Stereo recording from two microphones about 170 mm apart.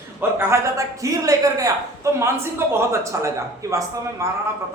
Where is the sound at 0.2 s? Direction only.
15° right (ahead or behind).